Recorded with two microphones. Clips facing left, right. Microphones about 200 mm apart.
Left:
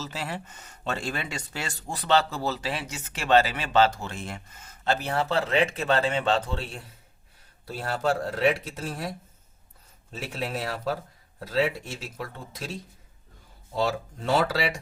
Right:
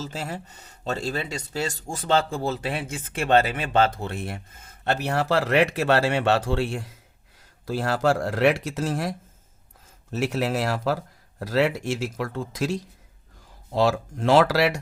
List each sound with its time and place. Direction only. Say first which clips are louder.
0.0 s speech: right 2 dB; 45° right (ahead or behind); by 9.1 s 90° right
10.1 s speech: right 8 dB; 80° right